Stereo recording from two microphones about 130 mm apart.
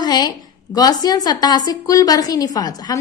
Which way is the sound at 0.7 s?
30° left (ahead or behind).